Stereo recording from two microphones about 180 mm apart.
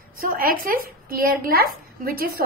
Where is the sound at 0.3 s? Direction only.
55° right (ahead or behind).